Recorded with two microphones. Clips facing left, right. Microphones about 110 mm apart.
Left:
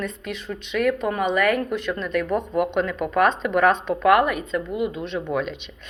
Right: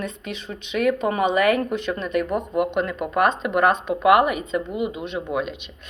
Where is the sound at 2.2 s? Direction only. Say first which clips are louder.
Even; 5° right (ahead or behind).